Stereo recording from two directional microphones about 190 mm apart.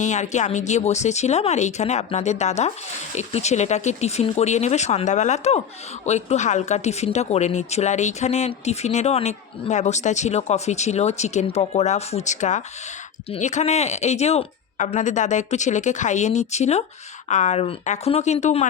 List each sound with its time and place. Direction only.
0.0 s speech: 40° left (ahead or behind)